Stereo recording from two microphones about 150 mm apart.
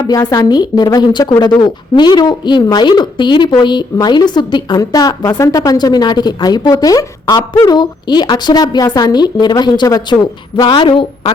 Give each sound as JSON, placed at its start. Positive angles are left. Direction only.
{"t": 0.0, "sound": "a woman's voice", "side_deg": 20}